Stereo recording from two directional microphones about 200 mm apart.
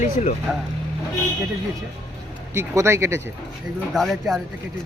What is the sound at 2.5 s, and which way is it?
Speech, 15° right (ahead or behind).